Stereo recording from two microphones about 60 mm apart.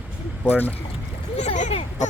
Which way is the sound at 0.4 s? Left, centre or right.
Left.